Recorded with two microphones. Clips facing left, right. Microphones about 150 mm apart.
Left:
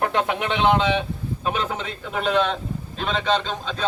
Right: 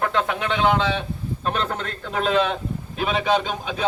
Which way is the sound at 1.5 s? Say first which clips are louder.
Even; 5° left (ahead or behind).